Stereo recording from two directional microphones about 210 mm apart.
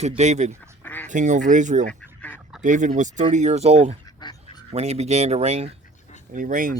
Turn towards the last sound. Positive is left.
turn(degrees=-40)  # may be behind; listen again after turning